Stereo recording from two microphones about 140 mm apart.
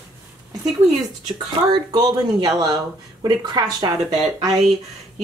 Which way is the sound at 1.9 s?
30° right (ahead or behind).